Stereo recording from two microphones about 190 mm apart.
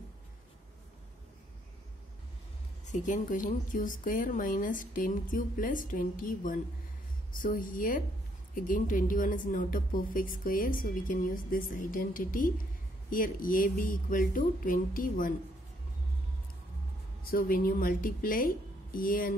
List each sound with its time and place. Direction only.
2.9 s a woman's voice: 40° left (ahead or behind)
17.3 s a woman's voice: 50° left (ahead or behind)